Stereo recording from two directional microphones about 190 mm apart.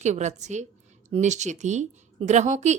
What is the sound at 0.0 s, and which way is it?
A woman's voice, 40° right (ahead or behind).